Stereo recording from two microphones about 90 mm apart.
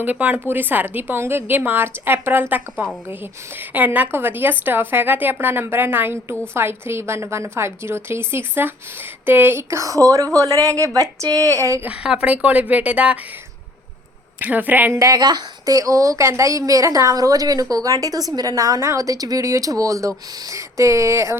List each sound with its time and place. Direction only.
0.0 s a woman's voice: 20° right (ahead or behind); by 11.9 s 35° right (ahead or behind)
11.9 s speech: 10° right (ahead or behind)
14.3 s a woman's voice: 20° right (ahead or behind)
14.9 s a woman's voice: 40° right (ahead or behind)